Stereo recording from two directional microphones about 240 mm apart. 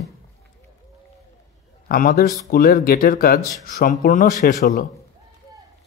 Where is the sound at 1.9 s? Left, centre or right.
Left.